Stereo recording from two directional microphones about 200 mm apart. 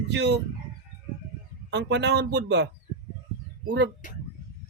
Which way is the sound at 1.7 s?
60° right (ahead or behind).